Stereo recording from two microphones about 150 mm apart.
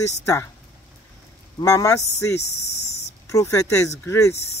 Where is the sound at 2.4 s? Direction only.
45° left (ahead or behind).